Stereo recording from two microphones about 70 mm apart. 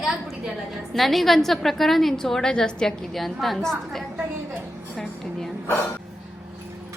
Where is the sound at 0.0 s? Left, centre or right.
Centre.